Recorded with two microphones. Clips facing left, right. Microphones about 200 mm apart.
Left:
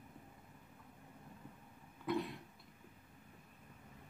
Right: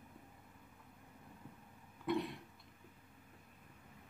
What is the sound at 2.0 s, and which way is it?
Cough, centre (ahead or behind).